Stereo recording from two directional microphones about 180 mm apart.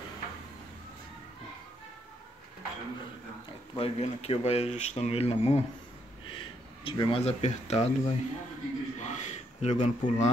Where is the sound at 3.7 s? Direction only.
35° left (ahead or behind).